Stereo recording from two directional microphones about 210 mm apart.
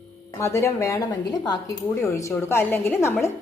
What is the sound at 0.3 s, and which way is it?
A woman's voice, 15° left (ahead or behind).